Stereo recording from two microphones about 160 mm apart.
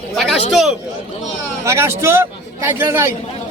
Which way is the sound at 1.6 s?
15° right (ahead or behind).